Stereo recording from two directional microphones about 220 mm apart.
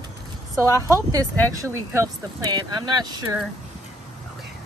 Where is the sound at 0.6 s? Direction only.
15° right (ahead or behind).